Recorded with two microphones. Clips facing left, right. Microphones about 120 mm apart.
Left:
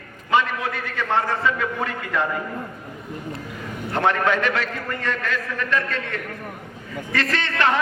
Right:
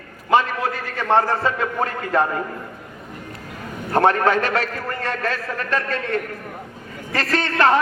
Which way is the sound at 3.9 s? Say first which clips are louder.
Right 4 dB; 40° right (ahead or behind).